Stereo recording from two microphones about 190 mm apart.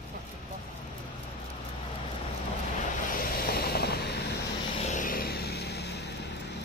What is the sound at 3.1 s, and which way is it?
Vehicle, 50° left (ahead or behind).